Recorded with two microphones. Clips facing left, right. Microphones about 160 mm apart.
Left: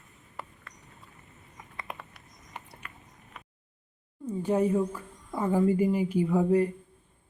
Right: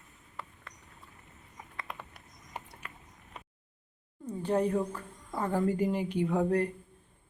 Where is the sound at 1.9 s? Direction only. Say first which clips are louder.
Left 3 dB; 15° left (ahead or behind).